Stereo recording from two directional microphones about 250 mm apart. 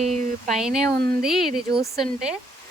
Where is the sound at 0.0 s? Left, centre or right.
Right.